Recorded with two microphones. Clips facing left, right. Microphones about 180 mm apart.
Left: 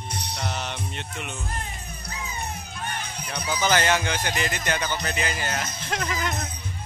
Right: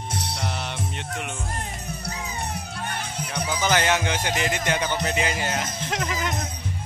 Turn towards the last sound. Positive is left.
turn(degrees=-15)  # may be behind; listen again after turning